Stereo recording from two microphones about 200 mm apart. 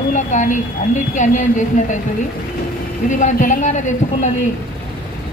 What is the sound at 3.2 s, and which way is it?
Speech, 40° left (ahead or behind).